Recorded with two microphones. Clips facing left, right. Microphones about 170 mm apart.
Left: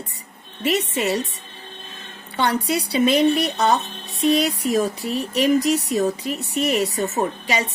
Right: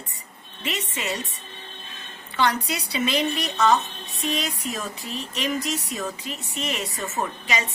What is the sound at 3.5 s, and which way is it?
A woman's voice, 35° left (ahead or behind).